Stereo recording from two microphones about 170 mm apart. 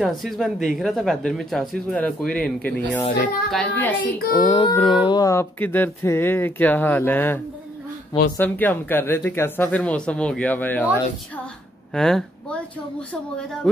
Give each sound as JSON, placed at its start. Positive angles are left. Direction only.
{"t": 0.0, "sound": "speech", "side_deg": 0}
{"t": 4.4, "sound": "speech", "side_deg": 25}
{"t": 11.9, "sound": "speech", "side_deg": 5}